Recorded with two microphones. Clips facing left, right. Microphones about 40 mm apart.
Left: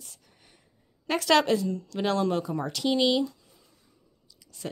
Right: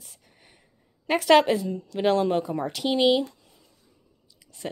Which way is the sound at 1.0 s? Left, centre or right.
Centre.